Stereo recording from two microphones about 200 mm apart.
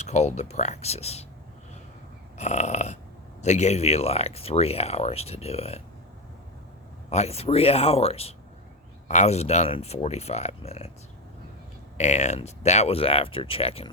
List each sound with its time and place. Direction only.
0.0 s speech: 35° left (ahead or behind)
2.4 s speech: 35° left (ahead or behind)
7.1 s speech: 30° left (ahead or behind)
11.9 s speech: 35° left (ahead or behind)